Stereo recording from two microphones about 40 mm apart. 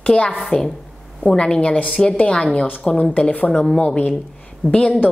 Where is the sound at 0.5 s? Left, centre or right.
Centre.